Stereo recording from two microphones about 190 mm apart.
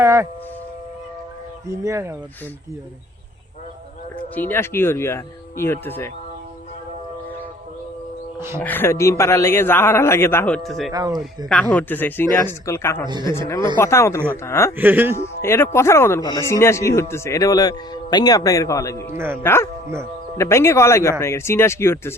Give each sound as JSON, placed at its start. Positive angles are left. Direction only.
{"t": 0.0, "sound": "a sound", "side_deg": -15}
{"t": 1.7, "sound": "speech", "side_deg": -15}
{"t": 4.4, "sound": "speech", "side_deg": 10}
{"t": 8.5, "sound": "speech", "side_deg": 10}
{"t": 10.9, "sound": "a man's voice", "side_deg": -20}
{"t": 11.4, "sound": "speech", "side_deg": 5}
{"t": 13.1, "sound": "a man's voice", "side_deg": -25}
{"t": 13.7, "sound": "speech", "side_deg": 15}
{"t": 14.8, "sound": "speech", "side_deg": -10}
{"t": 15.2, "sound": "speech", "side_deg": 15}
{"t": 19.1, "sound": "speech", "side_deg": -10}
{"t": 19.4, "sound": "speech", "side_deg": 10}